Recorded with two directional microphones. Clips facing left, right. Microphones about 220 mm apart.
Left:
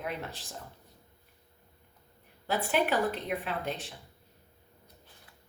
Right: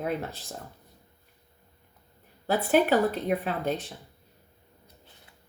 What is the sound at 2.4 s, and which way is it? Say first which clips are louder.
Speech: right 6 dB; 40° right (ahead or behind).